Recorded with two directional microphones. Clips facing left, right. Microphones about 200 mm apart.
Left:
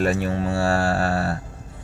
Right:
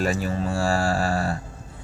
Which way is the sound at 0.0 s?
65° left (ahead or behind).